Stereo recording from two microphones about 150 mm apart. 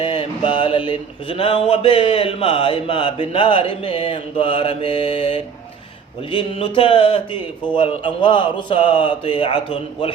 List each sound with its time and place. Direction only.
0.0 s mantra: 35° left (ahead or behind)